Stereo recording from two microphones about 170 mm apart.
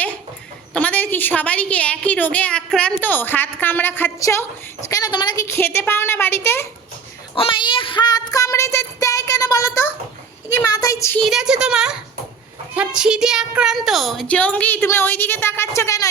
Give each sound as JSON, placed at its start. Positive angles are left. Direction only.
{"t": 0.7, "sound": "a woman's voice", "side_deg": 10}
{"t": 7.3, "sound": "child singing", "side_deg": 30}
{"t": 10.7, "sound": "a sound", "side_deg": 20}
{"t": 11.2, "sound": "a woman's voice", "side_deg": 0}